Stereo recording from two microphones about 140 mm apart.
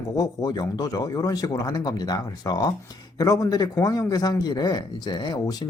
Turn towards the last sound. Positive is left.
turn(degrees=30)  # may be behind; listen again after turning